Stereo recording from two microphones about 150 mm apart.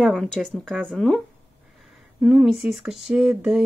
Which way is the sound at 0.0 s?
Centre (ahead or behind).